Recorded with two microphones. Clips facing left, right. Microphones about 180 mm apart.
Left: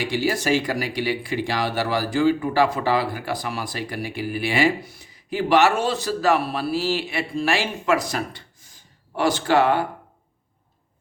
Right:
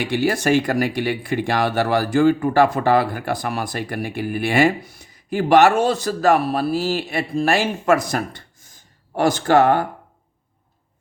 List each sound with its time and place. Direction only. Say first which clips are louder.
0.0 s a man's voice: right 3 dB; 55° right (ahead or behind)